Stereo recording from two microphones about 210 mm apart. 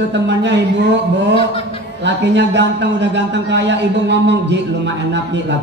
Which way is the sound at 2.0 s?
55° right (ahead or behind).